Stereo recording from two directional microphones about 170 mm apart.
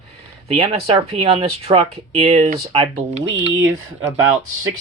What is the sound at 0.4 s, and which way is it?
Speech, 35° right (ahead or behind).